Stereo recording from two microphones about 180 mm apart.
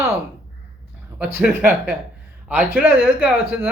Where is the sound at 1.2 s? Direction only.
5° right (ahead or behind).